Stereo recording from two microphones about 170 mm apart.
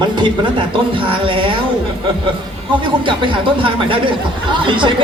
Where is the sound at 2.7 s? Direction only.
30° right (ahead or behind).